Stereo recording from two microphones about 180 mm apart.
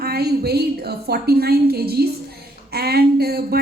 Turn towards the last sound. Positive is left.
turn(degrees=-60)  # may be behind; listen again after turning